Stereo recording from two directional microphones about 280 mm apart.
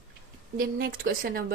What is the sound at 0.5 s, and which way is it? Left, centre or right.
Speech, right.